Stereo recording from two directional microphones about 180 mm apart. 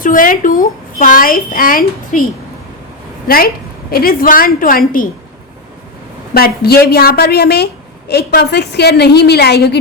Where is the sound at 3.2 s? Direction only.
55° left (ahead or behind).